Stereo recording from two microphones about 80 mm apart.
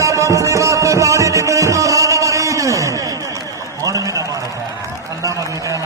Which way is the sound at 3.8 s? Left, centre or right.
Right.